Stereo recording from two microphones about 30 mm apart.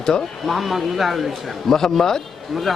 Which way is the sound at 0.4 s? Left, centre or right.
Centre.